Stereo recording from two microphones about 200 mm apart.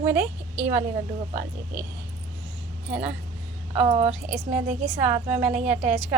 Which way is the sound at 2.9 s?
5° right (ahead or behind).